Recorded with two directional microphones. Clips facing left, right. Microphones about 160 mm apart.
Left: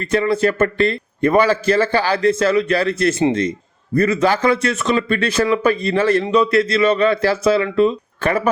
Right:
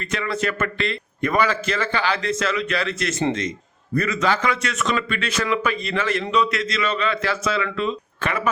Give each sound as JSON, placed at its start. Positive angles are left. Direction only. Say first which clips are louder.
{"t": 0.0, "sound": "a man's voice", "louder": "left 8 dB", "side_deg": 35}